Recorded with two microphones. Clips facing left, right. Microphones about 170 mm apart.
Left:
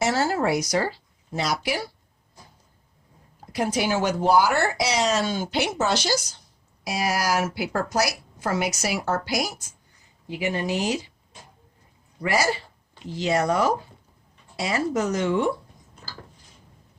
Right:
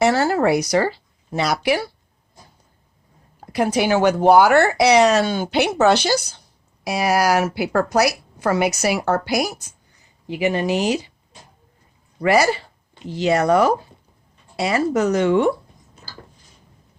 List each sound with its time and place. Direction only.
0.0 s speech: 60° right (ahead or behind)
3.4 s speech: 65° right (ahead or behind)
12.2 s speech: 65° right (ahead or behind)